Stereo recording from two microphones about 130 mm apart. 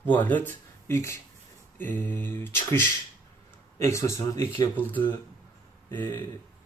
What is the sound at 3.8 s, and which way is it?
Speech, 20° left (ahead or behind).